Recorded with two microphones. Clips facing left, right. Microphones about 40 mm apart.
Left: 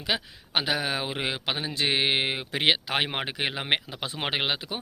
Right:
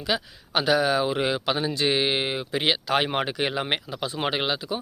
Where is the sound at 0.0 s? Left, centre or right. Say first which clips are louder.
Right 2 dB; left.